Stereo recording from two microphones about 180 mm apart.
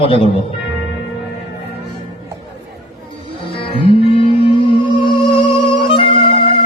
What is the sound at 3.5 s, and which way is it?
Music, 30° left (ahead or behind).